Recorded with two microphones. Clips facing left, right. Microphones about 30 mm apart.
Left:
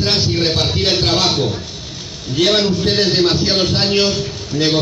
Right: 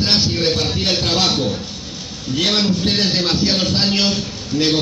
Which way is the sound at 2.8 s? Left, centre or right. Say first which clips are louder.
Left 3 dB; left.